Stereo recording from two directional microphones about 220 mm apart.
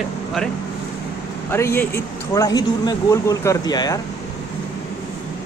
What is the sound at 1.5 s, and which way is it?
Speech, 10° left (ahead or behind).